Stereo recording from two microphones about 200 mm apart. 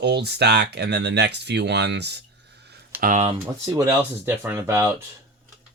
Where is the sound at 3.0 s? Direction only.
35° right (ahead or behind).